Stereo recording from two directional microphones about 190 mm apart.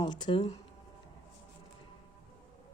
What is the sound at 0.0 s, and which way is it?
Speech, 20° left (ahead or behind).